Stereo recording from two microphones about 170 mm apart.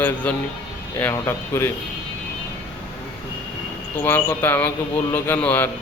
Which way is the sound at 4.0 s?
10° left (ahead or behind).